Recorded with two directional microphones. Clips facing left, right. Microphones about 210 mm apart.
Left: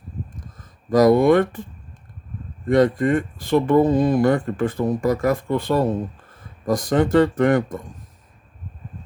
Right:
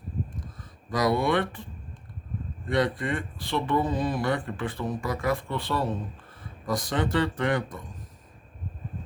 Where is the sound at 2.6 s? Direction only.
45° left (ahead or behind).